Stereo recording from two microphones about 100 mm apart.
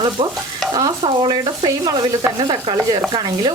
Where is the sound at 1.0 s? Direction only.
55° right (ahead or behind).